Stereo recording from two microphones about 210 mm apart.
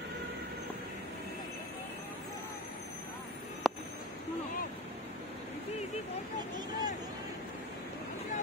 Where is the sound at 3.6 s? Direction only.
Centre (ahead or behind).